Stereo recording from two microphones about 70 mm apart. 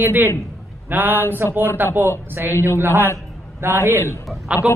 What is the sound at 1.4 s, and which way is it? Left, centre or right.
Mantra, right.